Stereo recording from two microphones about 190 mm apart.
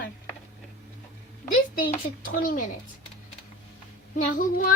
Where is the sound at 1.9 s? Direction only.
45° left (ahead or behind).